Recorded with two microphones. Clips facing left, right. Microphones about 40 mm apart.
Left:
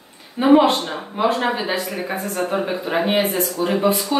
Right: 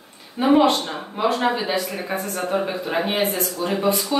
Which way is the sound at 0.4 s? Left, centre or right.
Centre.